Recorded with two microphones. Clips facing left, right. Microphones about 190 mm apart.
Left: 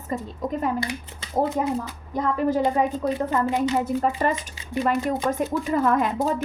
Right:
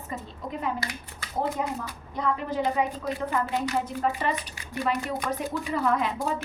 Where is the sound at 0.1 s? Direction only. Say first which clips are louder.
Left 8 dB; 45° left (ahead or behind).